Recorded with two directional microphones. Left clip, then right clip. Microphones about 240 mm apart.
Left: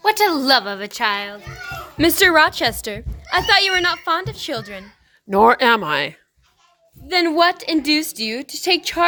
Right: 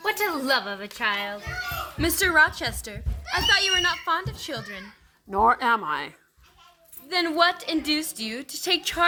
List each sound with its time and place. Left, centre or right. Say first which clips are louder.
0.0 s a woman's voice: left 9 dB; left
2.0 s speech: left 7 dB; left
5.3 s speech: left 7 dB; left
7.1 s a woman's voice: left 6 dB; left